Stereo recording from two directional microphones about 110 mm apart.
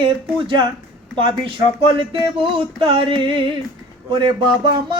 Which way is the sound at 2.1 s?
50° right (ahead or behind).